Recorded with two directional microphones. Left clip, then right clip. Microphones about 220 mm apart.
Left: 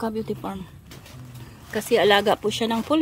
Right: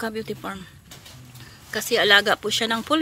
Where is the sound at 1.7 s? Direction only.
10° left (ahead or behind).